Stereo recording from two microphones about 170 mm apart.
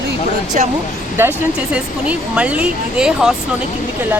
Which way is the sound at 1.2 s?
15° right (ahead or behind).